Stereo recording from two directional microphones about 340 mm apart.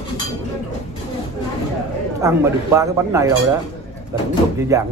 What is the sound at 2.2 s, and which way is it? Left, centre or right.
A man's voice, centre.